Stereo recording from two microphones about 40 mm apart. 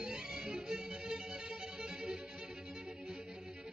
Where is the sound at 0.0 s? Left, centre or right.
Centre.